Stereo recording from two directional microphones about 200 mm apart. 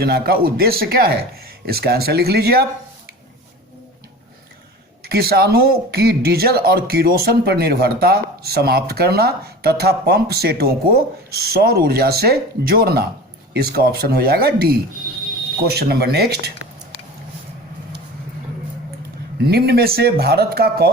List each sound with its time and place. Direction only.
0.0 s speech: 50° right (ahead or behind)
5.0 s speech: 50° right (ahead or behind)
19.5 s speech: 55° right (ahead or behind)